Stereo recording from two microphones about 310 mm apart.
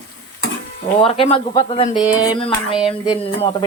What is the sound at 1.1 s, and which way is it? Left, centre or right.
Speech, centre.